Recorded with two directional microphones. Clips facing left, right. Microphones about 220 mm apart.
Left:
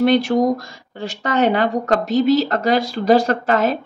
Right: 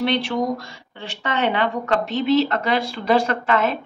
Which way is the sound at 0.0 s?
45° left (ahead or behind).